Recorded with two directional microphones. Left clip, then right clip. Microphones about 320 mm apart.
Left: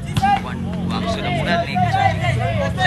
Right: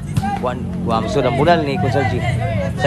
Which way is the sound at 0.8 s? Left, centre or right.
Centre.